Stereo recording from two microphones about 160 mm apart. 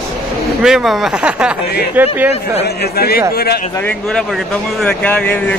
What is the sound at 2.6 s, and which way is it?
Speech, 75° left (ahead or behind).